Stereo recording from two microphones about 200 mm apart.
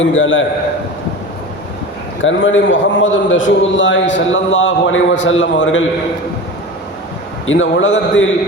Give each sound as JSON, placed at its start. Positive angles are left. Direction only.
{"t": 0.0, "sound": "a man's voice", "side_deg": 75}
{"t": 2.2, "sound": "a man's voice", "side_deg": 70}
{"t": 7.4, "sound": "a man's voice", "side_deg": 70}